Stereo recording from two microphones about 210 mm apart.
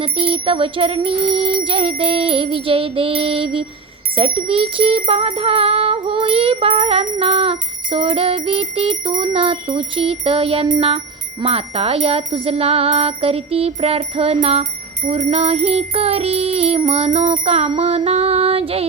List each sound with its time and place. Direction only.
0.0 s music: 25° right (ahead or behind)